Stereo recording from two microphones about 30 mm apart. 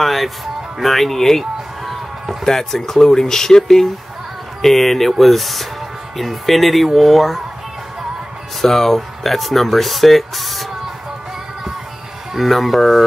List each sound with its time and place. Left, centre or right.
0.0 s music: centre
0.7 s speech: centre
2.4 s speech: centre
4.6 s speech: centre
8.5 s speech: centre
12.4 s speech: centre